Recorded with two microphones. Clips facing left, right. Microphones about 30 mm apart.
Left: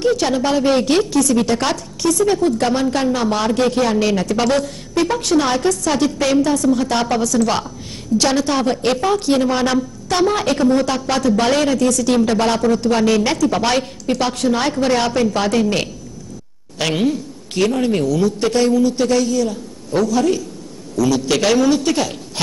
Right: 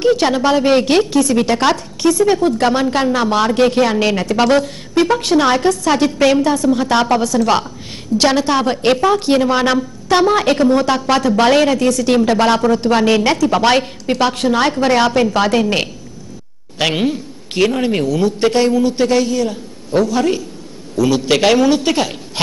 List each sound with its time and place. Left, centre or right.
0.0 s a woman's voice: right